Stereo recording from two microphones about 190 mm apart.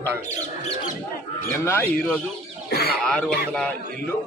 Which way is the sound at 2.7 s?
55° left (ahead or behind).